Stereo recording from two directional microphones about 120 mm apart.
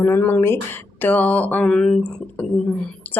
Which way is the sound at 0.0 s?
15° left (ahead or behind).